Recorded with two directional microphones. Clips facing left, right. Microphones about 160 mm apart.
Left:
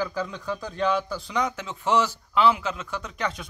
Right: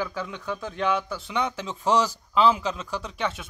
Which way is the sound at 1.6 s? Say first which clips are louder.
Right 2 dB; 35° right (ahead or behind).